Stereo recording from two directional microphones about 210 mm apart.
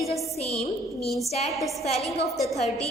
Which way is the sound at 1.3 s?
30° left (ahead or behind).